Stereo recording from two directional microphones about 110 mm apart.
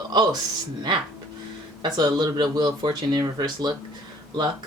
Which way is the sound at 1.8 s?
40° right (ahead or behind).